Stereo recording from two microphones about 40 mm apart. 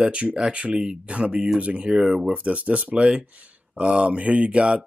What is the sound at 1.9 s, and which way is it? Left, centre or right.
Speech, centre.